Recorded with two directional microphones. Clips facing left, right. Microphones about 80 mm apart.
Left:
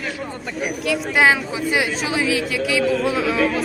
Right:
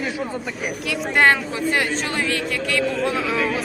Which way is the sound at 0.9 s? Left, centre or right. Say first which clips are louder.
Even; centre.